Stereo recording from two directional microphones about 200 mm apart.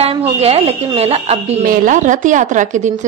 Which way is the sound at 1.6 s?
45° right (ahead or behind).